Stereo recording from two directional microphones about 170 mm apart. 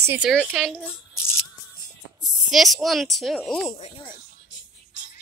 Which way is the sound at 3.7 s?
35° left (ahead or behind).